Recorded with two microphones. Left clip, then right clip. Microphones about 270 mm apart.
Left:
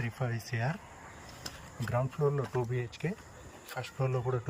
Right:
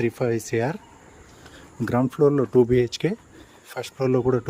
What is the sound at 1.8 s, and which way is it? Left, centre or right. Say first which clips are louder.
Speech: right 10 dB; right.